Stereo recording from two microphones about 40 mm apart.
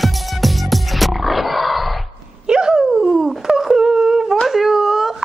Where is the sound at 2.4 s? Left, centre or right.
Right.